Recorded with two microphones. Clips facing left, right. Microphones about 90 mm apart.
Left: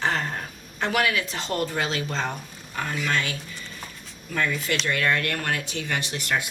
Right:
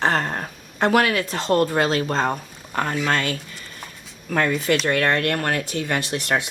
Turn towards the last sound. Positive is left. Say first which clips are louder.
# right 4 dB
turn(degrees=-40)  # may be behind; listen again after turning